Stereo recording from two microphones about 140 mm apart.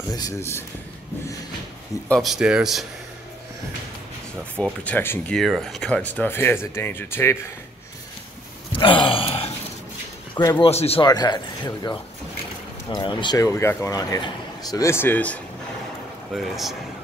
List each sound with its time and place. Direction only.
0.1 s a man's voice: 25° left (ahead or behind)
2.0 s speech: centre (ahead or behind)
4.8 s speech: 15° left (ahead or behind)
5.3 s speech: centre (ahead or behind); by 7.3 s 15° left (ahead or behind)
8.7 s a sound: 35° left (ahead or behind)
10.3 s speech: 25° left (ahead or behind)
10.6 s speech: 45° left (ahead or behind)
11.1 s a man's voice: 30° left (ahead or behind); by 15.4 s 10° left (ahead or behind)
16.3 s speech: centre (ahead or behind)